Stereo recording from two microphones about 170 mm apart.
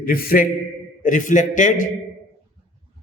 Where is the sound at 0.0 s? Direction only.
60° left (ahead or behind).